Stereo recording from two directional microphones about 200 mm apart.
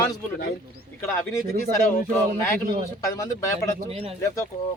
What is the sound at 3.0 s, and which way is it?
Speech, 15° left (ahead or behind).